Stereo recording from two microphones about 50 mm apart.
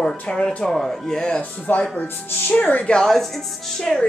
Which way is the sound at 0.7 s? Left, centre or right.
Centre.